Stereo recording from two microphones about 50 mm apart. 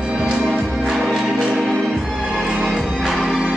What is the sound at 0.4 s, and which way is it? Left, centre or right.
Music, centre.